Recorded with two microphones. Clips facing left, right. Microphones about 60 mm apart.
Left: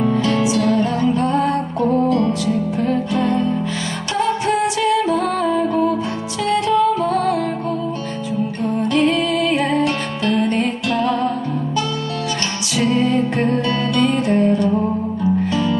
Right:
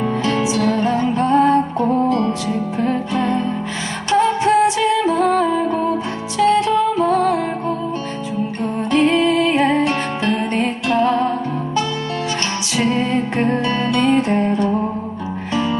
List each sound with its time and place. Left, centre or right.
0.0 s music: right
8.8 s music: right
12.7 s music: right